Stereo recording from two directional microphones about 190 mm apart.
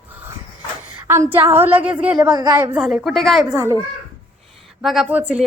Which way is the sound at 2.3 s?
20° right (ahead or behind).